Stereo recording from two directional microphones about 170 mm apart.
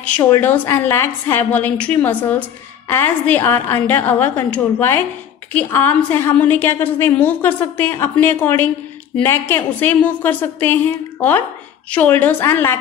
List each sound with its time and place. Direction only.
0.2 s a woman's voice: 15° left (ahead or behind)